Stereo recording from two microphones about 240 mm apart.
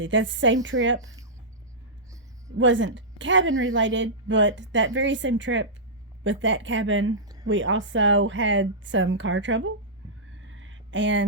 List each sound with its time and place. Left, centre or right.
0.0 s a woman's voice: right
0.9 s speech: centre
2.6 s a woman's voice: right
10.5 s a sound: right